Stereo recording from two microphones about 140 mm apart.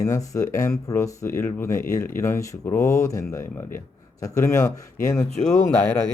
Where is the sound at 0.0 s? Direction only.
20° left (ahead or behind).